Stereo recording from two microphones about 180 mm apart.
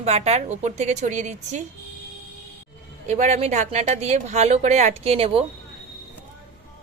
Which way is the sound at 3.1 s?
40° right (ahead or behind).